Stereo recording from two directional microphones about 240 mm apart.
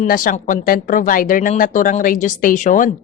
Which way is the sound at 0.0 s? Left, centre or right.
Left.